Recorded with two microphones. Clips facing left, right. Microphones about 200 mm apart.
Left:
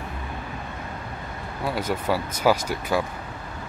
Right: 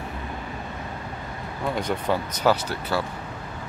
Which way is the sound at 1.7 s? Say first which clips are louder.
Even; 5° left (ahead or behind).